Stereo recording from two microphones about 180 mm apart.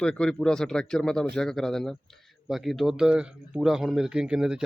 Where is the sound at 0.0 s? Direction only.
5° left (ahead or behind).